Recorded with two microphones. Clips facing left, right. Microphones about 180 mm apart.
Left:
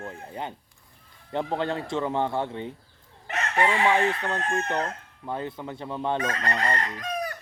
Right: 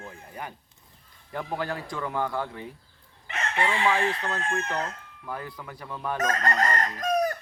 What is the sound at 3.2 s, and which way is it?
Crowing, 40° left (ahead or behind).